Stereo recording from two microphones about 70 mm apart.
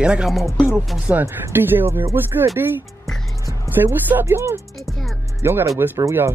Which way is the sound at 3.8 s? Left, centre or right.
Right.